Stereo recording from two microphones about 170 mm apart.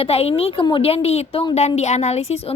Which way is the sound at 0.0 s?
35° left (ahead or behind).